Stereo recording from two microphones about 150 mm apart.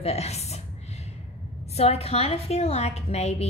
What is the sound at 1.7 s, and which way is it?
A woman's voice, 45° left (ahead or behind).